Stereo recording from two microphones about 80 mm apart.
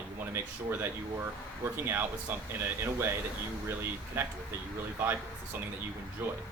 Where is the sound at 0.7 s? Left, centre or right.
Right.